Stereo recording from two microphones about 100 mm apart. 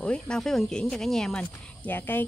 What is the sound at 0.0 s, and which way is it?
Speech, 10° left (ahead or behind).